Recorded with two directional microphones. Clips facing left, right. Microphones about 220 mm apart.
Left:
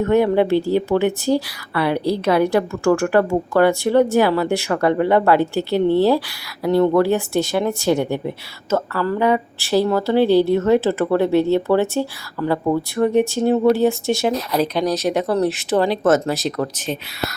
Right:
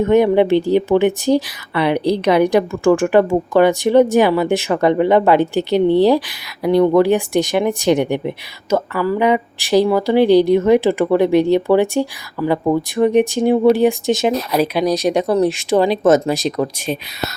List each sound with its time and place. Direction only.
0.0 s speech: 20° right (ahead or behind)